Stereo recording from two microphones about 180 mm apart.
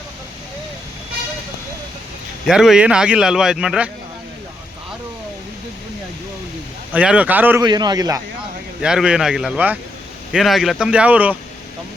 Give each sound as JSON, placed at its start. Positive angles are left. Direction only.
{"t": 2.5, "sound": "speech", "side_deg": -5}
{"t": 6.9, "sound": "speech", "side_deg": -5}
{"t": 7.6, "sound": "a man's voice", "side_deg": -25}
{"t": 8.8, "sound": "speech", "side_deg": -5}